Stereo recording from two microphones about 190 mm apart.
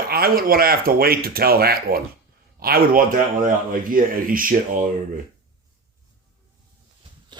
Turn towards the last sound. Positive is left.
turn(degrees=-25)  # may be behind; listen again after turning